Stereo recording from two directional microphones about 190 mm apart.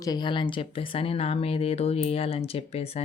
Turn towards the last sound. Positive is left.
turn(degrees=30)  # may be behind; listen again after turning